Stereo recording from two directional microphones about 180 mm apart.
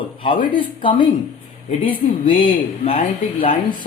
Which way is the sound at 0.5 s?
25° left (ahead or behind).